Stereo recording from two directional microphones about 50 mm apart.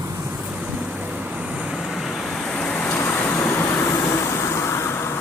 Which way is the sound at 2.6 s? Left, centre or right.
Left.